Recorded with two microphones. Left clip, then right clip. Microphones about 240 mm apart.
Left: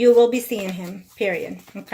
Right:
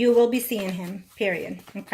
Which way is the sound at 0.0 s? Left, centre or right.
Centre.